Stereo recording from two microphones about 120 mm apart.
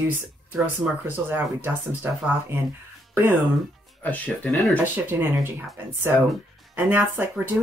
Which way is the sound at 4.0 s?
10° left (ahead or behind).